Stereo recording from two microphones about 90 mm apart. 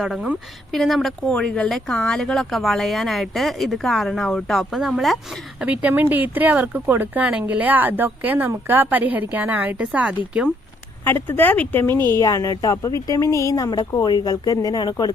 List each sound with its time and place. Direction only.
0.7 s speech: centre (ahead or behind)
5.6 s speech: 15° right (ahead or behind)
11.0 s speech: 25° left (ahead or behind)
11.9 s a woman's voice: 50° right (ahead or behind)
12.2 s speech: 40° left (ahead or behind)
13.7 s speech: 50° left (ahead or behind)